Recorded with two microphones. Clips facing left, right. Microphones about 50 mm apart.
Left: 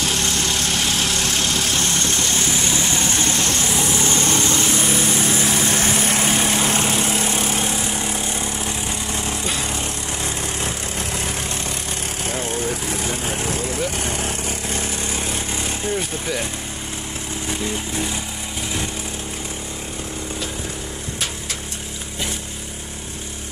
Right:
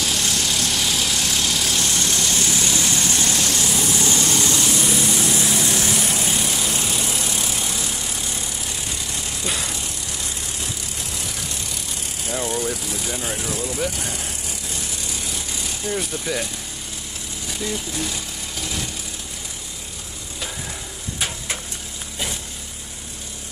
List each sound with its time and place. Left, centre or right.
0.0 s vehicle: left
17.5 s vehicle: left